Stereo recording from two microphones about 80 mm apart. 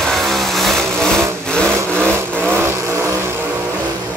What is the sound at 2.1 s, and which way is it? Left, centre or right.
Vehicle, right.